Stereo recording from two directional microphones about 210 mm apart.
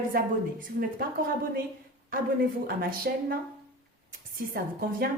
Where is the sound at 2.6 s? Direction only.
45° right (ahead or behind).